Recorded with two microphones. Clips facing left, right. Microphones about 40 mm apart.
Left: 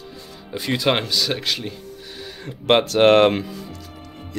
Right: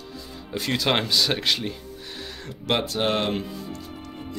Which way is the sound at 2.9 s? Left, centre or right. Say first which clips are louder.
Left 11 dB; left.